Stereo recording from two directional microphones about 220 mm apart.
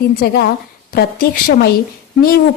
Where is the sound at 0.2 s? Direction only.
45° left (ahead or behind).